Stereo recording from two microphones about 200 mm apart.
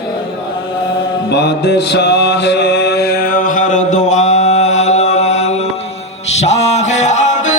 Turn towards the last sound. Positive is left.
turn(degrees=35)  # may be behind; listen again after turning